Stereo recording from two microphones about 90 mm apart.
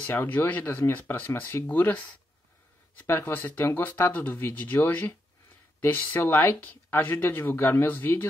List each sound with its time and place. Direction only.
0.0 s speech: 25° left (ahead or behind)